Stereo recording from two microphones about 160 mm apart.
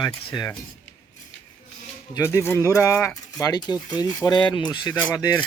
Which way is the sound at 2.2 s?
20° left (ahead or behind).